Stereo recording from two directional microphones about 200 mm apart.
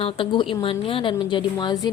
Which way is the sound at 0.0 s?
25° left (ahead or behind).